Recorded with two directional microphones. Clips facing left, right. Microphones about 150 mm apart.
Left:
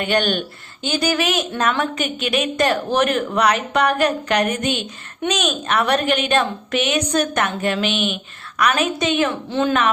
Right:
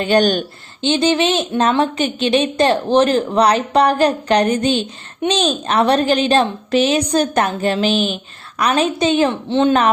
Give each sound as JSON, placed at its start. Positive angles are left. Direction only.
{"t": 0.0, "sound": "a woman's voice", "side_deg": -35}
{"t": 0.8, "sound": "a woman's voice", "side_deg": -25}